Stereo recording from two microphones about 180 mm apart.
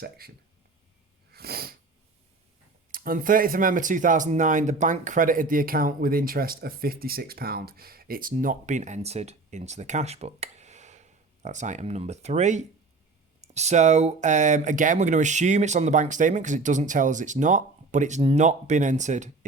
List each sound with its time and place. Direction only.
1.3 s sneeze: 60° right (ahead or behind)
2.9 s speech: 50° right (ahead or behind)